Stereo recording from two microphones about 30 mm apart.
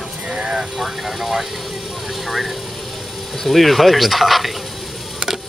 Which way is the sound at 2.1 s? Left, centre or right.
Centre.